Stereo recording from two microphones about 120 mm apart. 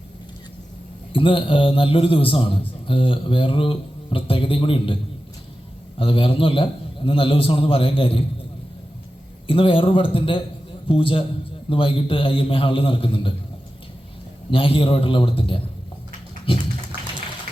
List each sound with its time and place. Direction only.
1.1 s a man's voice: 45° left (ahead or behind)
6.0 s a man's voice: 45° left (ahead or behind)
9.5 s a man's voice: 45° left (ahead or behind)
14.5 s a man's voice: 45° left (ahead or behind)